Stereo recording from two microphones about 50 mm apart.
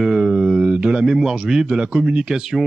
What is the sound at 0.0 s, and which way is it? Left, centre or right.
A man's voice, centre.